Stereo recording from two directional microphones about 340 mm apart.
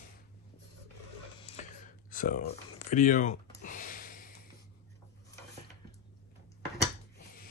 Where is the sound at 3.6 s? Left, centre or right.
Left.